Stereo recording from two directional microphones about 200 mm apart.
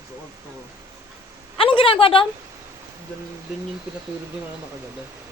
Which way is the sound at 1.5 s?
25° left (ahead or behind).